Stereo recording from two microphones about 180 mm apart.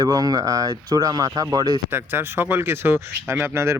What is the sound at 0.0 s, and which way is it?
Speech, 20° right (ahead or behind).